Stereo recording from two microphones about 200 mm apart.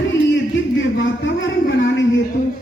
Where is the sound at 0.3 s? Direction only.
65° left (ahead or behind).